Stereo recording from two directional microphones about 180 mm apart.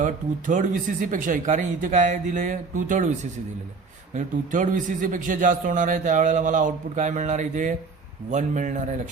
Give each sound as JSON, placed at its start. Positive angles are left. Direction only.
{"t": 0.0, "sound": "a man's voice", "side_deg": -45}
{"t": 4.1, "sound": "a man's voice", "side_deg": -45}